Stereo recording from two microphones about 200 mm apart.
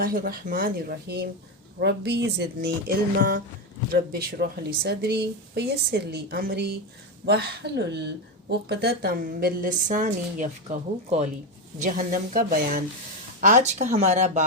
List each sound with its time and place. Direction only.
0.0 s speech: 45° right (ahead or behind)